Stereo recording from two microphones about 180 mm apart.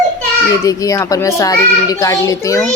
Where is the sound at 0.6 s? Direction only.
20° left (ahead or behind).